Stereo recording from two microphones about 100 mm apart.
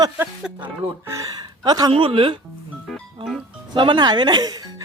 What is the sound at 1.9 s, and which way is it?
Speech, 60° right (ahead or behind).